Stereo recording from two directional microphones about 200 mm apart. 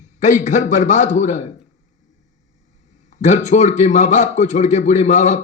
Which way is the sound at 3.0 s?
35° left (ahead or behind).